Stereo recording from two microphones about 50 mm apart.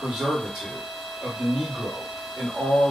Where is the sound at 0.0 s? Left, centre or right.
Centre.